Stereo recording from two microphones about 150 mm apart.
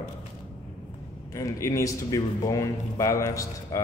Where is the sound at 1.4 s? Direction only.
20° left (ahead or behind).